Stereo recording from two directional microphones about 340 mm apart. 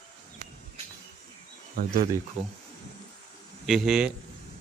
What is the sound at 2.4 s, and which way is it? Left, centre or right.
Speech, centre.